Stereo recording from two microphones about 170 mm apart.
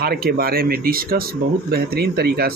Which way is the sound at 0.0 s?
65° right (ahead or behind).